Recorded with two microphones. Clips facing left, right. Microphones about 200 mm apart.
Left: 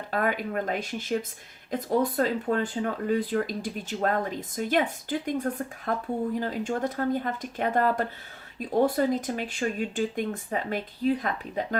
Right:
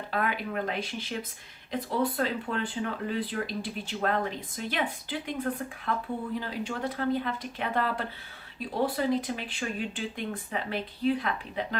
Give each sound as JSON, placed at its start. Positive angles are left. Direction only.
{"t": 0.1, "sound": "speech", "side_deg": 45}